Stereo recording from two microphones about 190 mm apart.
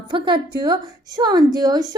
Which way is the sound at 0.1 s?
25° right (ahead or behind).